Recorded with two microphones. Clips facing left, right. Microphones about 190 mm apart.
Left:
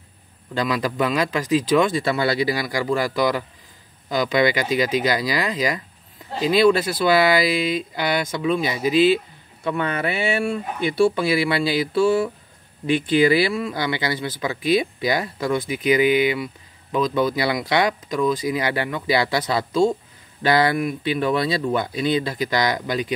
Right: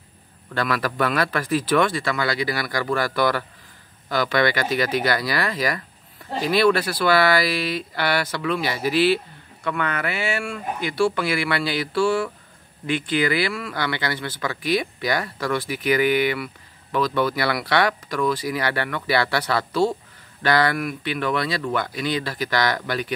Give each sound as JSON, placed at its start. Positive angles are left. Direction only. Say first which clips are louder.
{"t": 0.6, "sound": "speech", "louder": "left 1 dB", "side_deg": 15}